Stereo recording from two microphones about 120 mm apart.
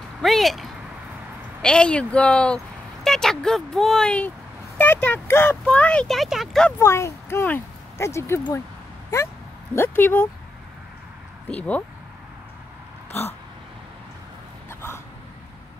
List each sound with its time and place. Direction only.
0.2 s speech: centre (ahead or behind)
6.8 s speech: 25° left (ahead or behind)
9.8 s speech: 15° left (ahead or behind)
11.4 s speech: 10° left (ahead or behind)
14.7 s a sound: 20° left (ahead or behind)